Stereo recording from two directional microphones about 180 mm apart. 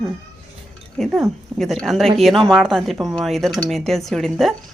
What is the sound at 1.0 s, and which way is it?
Speech, centre (ahead or behind).